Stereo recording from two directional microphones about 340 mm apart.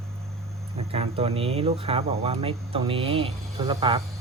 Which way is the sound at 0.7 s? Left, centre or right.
Centre.